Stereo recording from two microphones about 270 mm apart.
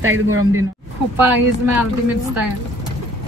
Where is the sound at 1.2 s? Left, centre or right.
Centre.